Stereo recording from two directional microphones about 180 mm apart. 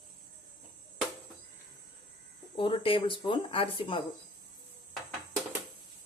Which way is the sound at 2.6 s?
30° left (ahead or behind).